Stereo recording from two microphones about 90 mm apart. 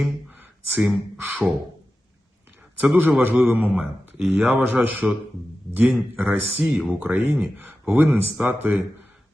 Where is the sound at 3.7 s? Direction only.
5° right (ahead or behind).